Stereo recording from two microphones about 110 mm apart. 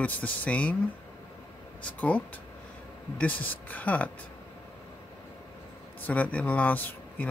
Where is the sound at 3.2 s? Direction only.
15° left (ahead or behind).